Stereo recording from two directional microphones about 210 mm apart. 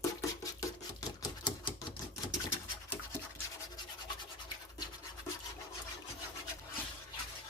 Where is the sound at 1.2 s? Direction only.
20° left (ahead or behind).